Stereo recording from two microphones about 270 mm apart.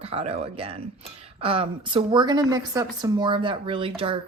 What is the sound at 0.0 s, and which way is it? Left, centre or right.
Speech, right.